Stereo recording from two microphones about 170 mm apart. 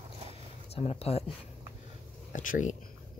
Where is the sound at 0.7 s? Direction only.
35° left (ahead or behind).